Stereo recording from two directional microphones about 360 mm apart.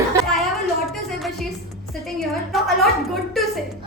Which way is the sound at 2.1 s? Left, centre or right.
Centre.